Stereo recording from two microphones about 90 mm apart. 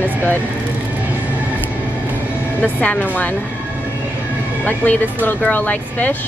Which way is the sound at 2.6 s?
15° left (ahead or behind).